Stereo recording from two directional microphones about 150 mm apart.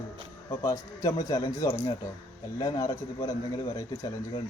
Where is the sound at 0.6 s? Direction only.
25° left (ahead or behind).